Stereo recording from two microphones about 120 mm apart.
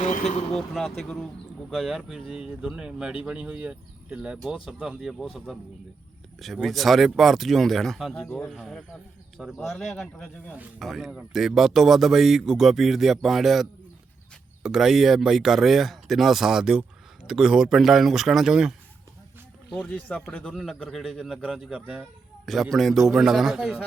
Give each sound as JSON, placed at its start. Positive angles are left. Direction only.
{"t": 0.0, "sound": "vehicle", "side_deg": 90}
{"t": 0.5, "sound": "speech", "side_deg": 0}
{"t": 19.9, "sound": "speech", "side_deg": 15}
{"t": 20.5, "sound": "speech", "side_deg": -5}